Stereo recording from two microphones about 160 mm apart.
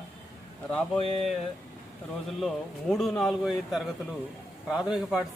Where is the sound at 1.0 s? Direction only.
40° left (ahead or behind).